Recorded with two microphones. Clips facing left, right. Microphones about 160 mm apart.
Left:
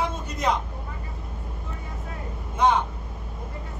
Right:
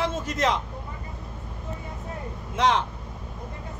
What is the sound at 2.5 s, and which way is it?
Speech, 90° right.